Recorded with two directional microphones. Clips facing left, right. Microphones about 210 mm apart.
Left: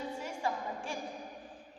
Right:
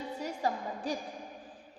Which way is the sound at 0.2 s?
40° right (ahead or behind).